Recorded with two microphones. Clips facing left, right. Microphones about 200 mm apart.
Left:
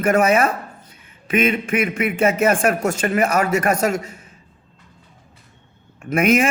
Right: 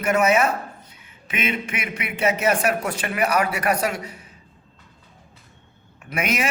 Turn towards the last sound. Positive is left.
turn(degrees=50)  # may be behind; listen again after turning